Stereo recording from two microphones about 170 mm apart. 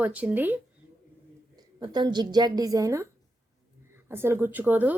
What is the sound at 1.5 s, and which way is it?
A woman's voice, 25° right (ahead or behind).